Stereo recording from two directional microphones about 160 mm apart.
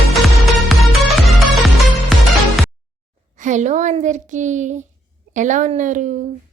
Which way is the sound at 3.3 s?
50° right (ahead or behind).